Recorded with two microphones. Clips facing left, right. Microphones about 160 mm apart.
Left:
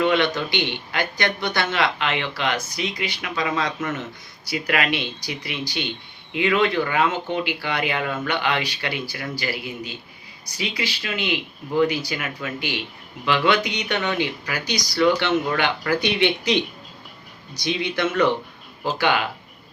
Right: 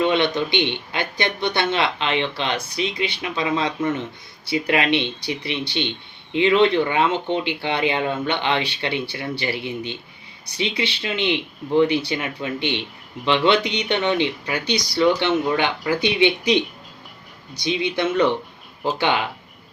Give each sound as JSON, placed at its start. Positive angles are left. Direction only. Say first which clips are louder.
{"t": 0.0, "sound": "speech", "louder": "right 1 dB", "side_deg": -20}
{"t": 17.6, "sound": "speech", "louder": "right 1 dB", "side_deg": -20}